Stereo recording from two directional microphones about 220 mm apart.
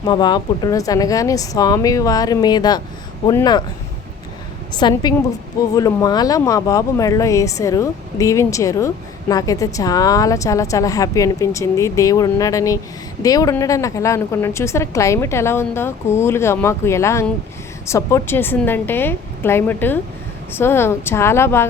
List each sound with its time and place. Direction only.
0.0 s a woman's voice: 20° left (ahead or behind)
4.7 s a woman's voice: 20° left (ahead or behind)